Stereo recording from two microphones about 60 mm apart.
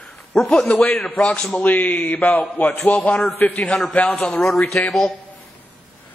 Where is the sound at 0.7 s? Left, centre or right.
Left.